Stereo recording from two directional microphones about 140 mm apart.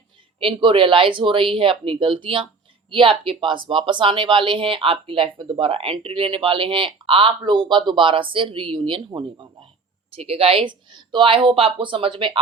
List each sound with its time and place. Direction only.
0.3 s speech: 40° right (ahead or behind)